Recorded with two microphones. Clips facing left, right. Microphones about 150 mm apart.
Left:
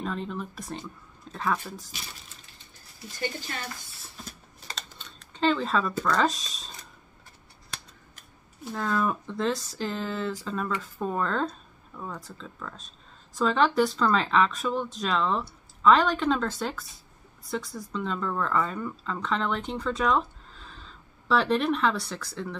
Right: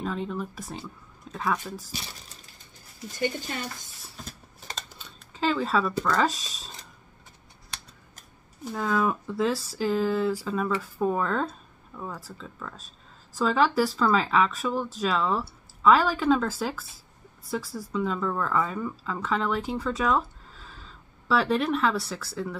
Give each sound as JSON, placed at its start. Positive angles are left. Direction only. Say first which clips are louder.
{"t": 0.0, "sound": "speech", "louder": "right 2 dB", "side_deg": -5}
{"t": 3.2, "sound": "speech", "louder": "right 4 dB", "side_deg": -20}
{"t": 4.9, "sound": "speech", "louder": "even", "side_deg": -5}
{"t": 8.7, "sound": "speech", "louder": "right 2 dB", "side_deg": -5}